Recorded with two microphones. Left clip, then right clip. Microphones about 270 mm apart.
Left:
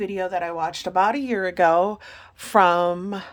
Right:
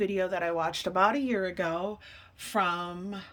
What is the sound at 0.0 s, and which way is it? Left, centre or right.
A woman's voice, centre.